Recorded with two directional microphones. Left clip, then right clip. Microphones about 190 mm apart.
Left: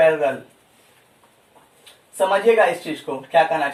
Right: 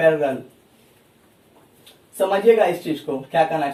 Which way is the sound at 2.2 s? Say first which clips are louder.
Even; 50° left (ahead or behind).